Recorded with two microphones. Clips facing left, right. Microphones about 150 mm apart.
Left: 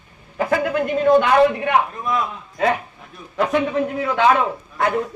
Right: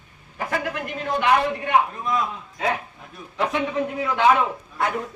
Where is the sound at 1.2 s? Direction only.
60° left (ahead or behind).